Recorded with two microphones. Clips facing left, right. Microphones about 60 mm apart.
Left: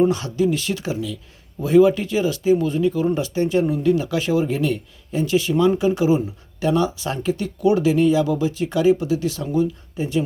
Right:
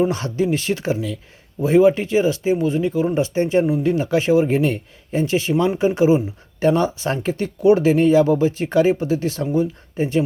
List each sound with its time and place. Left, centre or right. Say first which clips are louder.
0.1 s speech: even; right